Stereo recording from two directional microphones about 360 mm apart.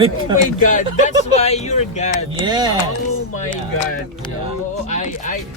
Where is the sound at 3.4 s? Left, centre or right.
Centre.